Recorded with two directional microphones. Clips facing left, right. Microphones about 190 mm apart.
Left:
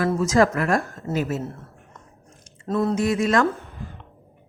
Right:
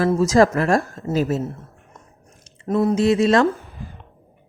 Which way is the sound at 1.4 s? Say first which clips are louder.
Right 4 dB; 15° right (ahead or behind).